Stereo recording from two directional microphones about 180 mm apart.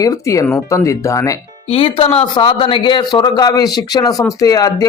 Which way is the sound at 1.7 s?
30° left (ahead or behind).